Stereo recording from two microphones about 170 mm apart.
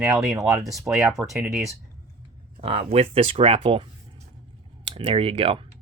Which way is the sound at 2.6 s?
35° right (ahead or behind).